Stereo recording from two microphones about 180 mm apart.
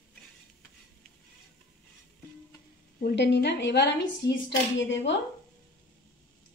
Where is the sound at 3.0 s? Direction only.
70° left (ahead or behind).